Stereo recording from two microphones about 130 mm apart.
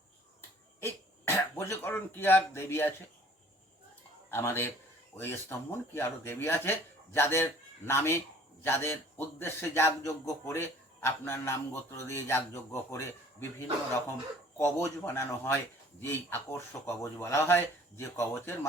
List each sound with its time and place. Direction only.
0.8 s speech: 20° left (ahead or behind)
4.3 s a man's voice: 20° left (ahead or behind)
15.0 s speech: 20° left (ahead or behind)